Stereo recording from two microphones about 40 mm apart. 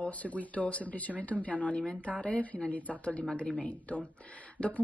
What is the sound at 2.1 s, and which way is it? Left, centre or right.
Speech, left.